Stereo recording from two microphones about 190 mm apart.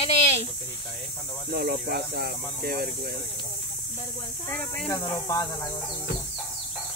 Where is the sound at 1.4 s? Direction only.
55° right (ahead or behind).